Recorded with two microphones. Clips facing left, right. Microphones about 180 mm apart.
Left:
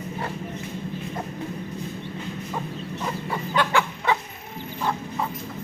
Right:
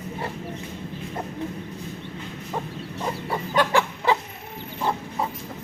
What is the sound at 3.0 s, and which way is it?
Chicken, 30° right (ahead or behind).